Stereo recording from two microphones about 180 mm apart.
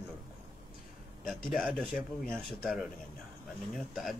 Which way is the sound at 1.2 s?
Centre (ahead or behind).